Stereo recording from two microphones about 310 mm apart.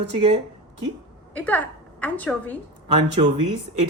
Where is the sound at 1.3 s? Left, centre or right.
Centre.